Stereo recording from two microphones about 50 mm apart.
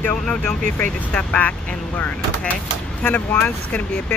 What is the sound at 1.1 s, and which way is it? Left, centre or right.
Speech, left.